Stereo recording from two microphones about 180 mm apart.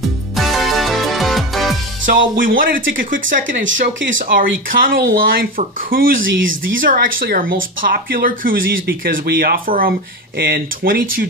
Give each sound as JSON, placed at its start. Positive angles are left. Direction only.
{"t": 0.4, "sound": "music", "side_deg": 0}
{"t": 2.0, "sound": "speech", "side_deg": -50}
{"t": 6.2, "sound": "speech", "side_deg": -90}
{"t": 6.8, "sound": "speech", "side_deg": -50}